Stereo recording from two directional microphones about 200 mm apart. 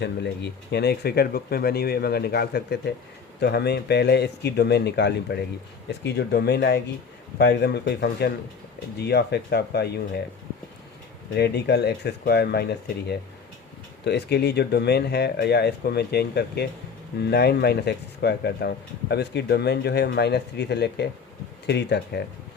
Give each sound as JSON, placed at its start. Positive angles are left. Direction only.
{"t": 0.7, "sound": "speech", "side_deg": 55}
{"t": 11.3, "sound": "speech", "side_deg": 55}
{"t": 14.0, "sound": "speech", "side_deg": 55}